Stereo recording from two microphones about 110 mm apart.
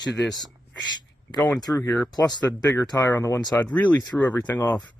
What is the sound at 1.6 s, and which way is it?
Speech, 30° left (ahead or behind).